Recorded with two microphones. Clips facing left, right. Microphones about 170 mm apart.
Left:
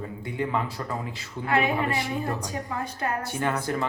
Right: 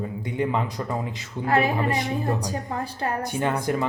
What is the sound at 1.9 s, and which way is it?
Speech, 20° right (ahead or behind).